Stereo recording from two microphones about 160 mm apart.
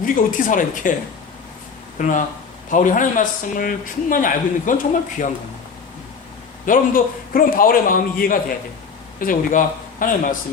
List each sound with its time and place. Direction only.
0.0 s a man's voice: 55° left (ahead or behind)
2.0 s a man's voice: 55° left (ahead or behind)
6.7 s a man's voice: 60° left (ahead or behind)